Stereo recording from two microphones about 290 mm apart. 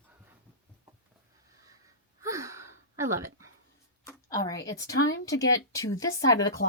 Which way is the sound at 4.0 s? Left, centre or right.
Centre.